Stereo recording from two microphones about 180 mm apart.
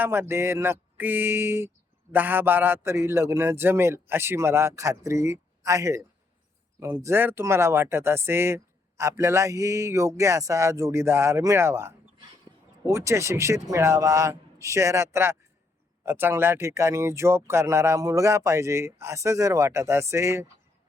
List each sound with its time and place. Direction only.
0.0 s speech: 15° right (ahead or behind)